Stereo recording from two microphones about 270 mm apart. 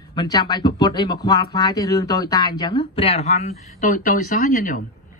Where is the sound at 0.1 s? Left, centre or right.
Centre.